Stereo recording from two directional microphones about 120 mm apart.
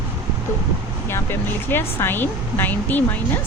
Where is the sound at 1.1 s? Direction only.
20° left (ahead or behind).